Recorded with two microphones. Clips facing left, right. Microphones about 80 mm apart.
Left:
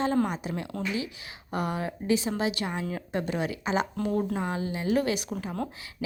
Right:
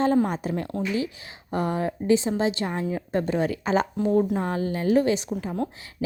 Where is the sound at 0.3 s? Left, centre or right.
Right.